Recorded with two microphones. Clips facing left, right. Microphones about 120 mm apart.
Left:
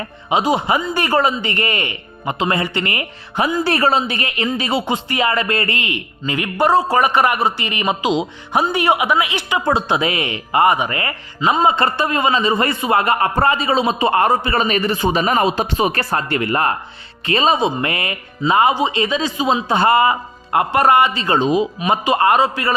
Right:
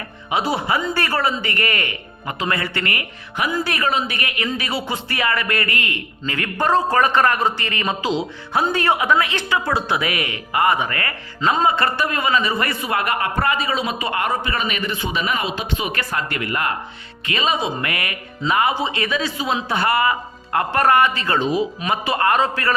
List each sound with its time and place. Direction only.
0.3 s a man's voice: 20° left (ahead or behind)
9.6 s a man's voice: 25° left (ahead or behind)